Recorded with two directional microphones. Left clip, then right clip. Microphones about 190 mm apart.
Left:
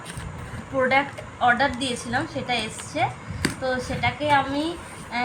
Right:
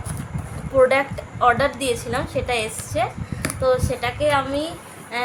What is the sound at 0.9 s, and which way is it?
A woman's voice, 35° right (ahead or behind).